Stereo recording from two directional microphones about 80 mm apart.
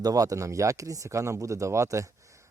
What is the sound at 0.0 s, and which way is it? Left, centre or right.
Speech, right.